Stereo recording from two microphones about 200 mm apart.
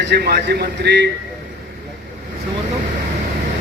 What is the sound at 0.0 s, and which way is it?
A man's voice, 55° right (ahead or behind).